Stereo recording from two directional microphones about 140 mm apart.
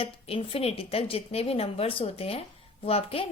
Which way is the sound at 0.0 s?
40° left (ahead or behind).